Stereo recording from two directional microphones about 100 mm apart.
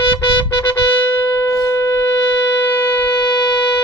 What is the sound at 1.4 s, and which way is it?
Shofar, 30° left (ahead or behind).